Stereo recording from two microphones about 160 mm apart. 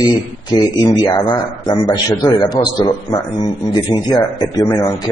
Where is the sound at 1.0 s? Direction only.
25° left (ahead or behind).